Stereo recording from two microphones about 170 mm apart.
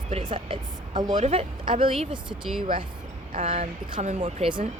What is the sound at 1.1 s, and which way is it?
Speech, 40° right (ahead or behind).